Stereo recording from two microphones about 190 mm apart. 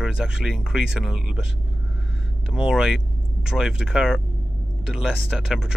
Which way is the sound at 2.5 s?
5° right (ahead or behind).